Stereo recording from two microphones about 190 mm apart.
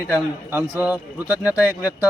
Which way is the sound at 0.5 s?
10° right (ahead or behind).